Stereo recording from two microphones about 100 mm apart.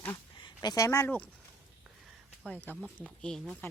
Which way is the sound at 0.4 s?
40° left (ahead or behind).